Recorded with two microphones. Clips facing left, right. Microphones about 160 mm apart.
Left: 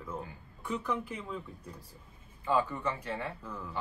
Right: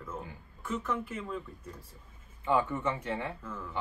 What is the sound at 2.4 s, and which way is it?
Speech, 20° right (ahead or behind).